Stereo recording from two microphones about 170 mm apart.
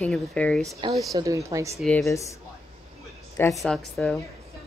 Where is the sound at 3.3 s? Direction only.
15° left (ahead or behind).